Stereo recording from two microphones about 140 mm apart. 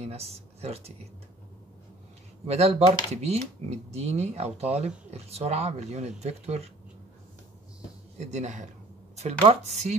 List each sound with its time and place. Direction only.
0.0 s speech: 50° right (ahead or behind)
2.4 s speech: 50° right (ahead or behind)
8.2 s speech: 55° right (ahead or behind)